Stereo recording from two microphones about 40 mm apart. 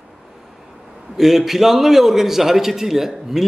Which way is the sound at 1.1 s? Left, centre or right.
Centre.